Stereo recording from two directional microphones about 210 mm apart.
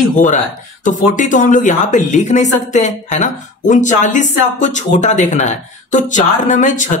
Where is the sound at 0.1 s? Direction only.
35° left (ahead or behind).